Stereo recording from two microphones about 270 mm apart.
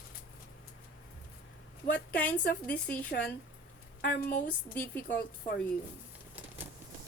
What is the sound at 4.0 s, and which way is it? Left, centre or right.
A woman's voice, left.